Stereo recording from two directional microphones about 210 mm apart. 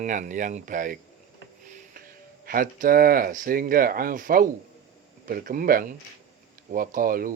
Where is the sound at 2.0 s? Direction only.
45° right (ahead or behind).